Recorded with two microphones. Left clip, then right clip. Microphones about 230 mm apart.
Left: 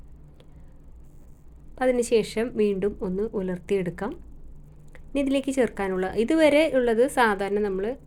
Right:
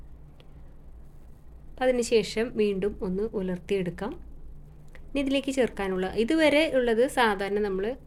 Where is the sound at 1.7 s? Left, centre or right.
Centre.